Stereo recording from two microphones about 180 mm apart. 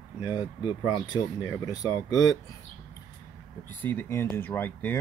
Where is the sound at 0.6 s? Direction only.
25° left (ahead or behind).